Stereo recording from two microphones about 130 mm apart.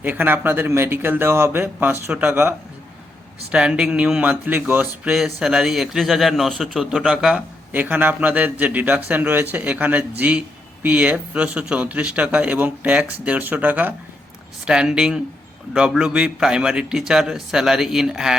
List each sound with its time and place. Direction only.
0.0 s a man's voice: 15° right (ahead or behind)
5.1 s a man's voice: 5° right (ahead or behind)